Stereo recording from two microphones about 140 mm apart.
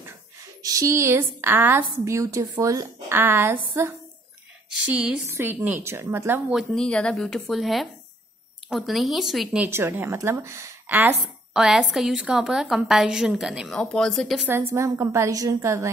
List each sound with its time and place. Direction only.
0.6 s a woman's voice: 25° right (ahead or behind)
6.5 s a woman's voice: 5° left (ahead or behind)
9.7 s a woman's voice: 15° right (ahead or behind)
11.1 s a woman's voice: 5° right (ahead or behind)
14.4 s a woman's voice: 15° right (ahead or behind)